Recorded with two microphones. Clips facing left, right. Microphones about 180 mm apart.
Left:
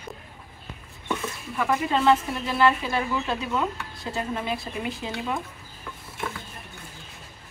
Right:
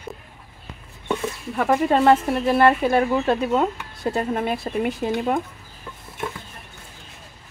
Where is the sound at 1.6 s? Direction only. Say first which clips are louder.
Right 6 dB; 45° right (ahead or behind).